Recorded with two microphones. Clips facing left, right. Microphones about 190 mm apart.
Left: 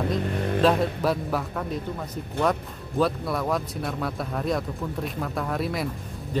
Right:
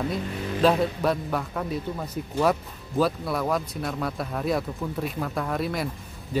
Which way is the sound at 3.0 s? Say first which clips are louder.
Even; centre (ahead or behind).